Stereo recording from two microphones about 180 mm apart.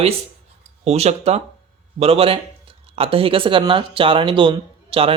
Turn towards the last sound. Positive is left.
turn(degrees=-30)  # may be behind; listen again after turning